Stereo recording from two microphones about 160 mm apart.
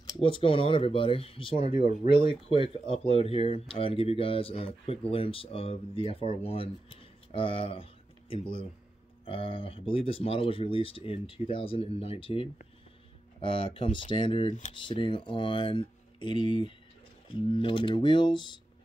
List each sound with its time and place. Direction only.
0.0 s speech: 30° left (ahead or behind)